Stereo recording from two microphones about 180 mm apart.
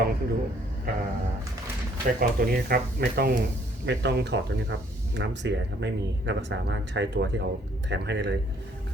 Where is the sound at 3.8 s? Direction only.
75° right (ahead or behind).